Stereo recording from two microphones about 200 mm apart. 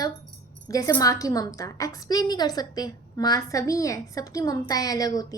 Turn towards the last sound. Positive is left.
turn(degrees=15)  # may be behind; listen again after turning